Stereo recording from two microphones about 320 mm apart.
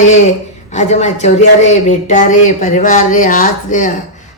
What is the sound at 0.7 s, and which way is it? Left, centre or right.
A woman's voice, left.